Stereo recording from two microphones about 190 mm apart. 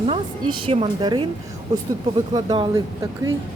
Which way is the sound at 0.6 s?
30° right (ahead or behind).